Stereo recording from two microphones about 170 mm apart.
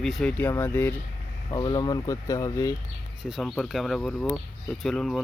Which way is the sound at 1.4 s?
25° left (ahead or behind).